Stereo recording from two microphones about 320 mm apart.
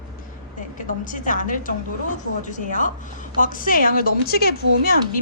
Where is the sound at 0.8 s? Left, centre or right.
Left.